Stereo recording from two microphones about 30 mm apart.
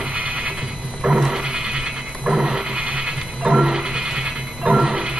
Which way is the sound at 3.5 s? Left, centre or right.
Right.